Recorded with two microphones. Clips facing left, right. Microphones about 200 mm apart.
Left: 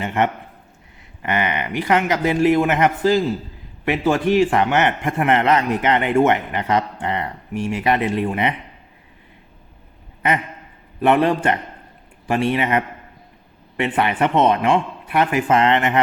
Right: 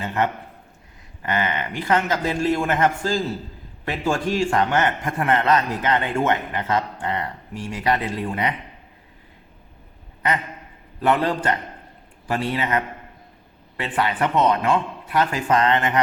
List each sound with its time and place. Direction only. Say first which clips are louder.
0.0 s a man's voice: left 3 dB; 20° left (ahead or behind)
11.0 s a man's voice: left 4 dB; 20° left (ahead or behind)